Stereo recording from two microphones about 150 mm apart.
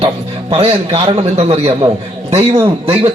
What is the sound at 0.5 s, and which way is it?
A man's voice, 40° right (ahead or behind).